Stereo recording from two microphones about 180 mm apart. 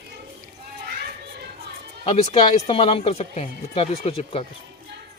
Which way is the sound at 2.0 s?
35° left (ahead or behind).